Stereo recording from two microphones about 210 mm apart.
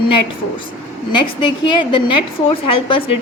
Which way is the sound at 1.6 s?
20° left (ahead or behind).